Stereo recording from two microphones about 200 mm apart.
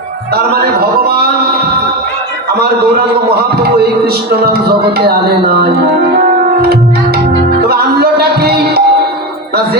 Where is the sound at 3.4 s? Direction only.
50° right (ahead or behind).